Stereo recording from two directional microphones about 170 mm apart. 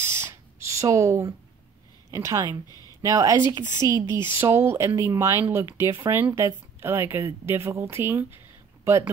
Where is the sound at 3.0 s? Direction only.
20° right (ahead or behind).